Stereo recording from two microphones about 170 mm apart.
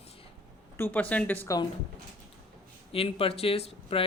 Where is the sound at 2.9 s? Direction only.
35° left (ahead or behind).